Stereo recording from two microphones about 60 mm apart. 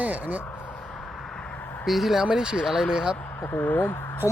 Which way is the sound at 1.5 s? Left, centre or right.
Left.